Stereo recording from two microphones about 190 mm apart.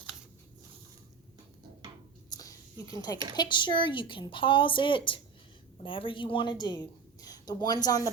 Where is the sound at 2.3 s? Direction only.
20° left (ahead or behind).